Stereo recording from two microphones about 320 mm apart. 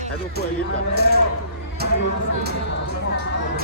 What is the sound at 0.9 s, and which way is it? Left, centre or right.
Speech, right.